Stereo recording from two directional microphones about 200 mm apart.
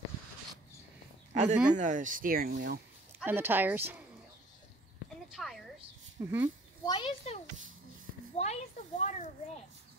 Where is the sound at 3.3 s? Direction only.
10° right (ahead or behind).